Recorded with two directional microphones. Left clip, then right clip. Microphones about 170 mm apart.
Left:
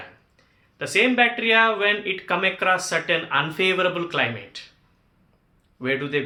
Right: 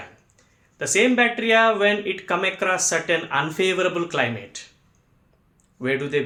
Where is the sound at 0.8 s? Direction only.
30° right (ahead or behind).